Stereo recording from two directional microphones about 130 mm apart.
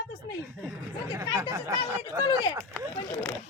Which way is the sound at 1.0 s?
20° right (ahead or behind).